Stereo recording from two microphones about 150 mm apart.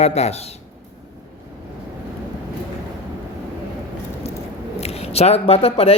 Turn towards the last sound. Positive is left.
turn(degrees=40)  # may be behind; listen again after turning